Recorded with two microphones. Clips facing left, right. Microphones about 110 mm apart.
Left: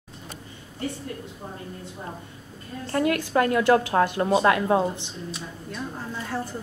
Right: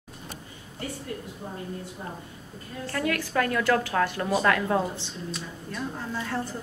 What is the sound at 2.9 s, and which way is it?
A woman's voice, 25° left (ahead or behind).